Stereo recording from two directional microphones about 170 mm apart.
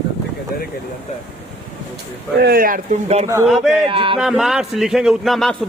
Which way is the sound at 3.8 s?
30° right (ahead or behind).